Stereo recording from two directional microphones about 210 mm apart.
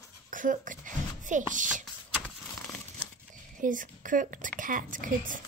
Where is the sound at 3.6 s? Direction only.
40° right (ahead or behind).